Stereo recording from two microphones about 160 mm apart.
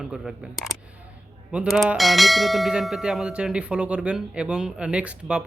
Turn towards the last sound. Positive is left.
turn(degrees=-5)  # may be behind; listen again after turning